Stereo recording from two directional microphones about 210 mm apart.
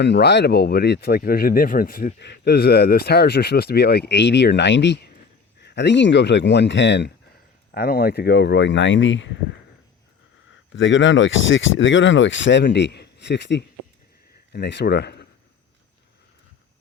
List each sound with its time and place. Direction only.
0.0 s speech: 55° left (ahead or behind)
10.7 s speech: 60° left (ahead or behind)